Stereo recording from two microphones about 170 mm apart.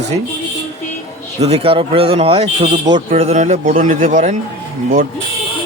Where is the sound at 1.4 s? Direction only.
35° right (ahead or behind).